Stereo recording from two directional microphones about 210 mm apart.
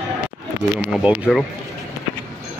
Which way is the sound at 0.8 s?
5° right (ahead or behind).